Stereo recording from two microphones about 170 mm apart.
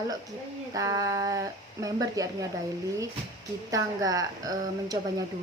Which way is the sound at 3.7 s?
20° right (ahead or behind).